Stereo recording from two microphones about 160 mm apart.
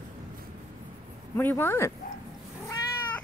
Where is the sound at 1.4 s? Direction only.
15° left (ahead or behind).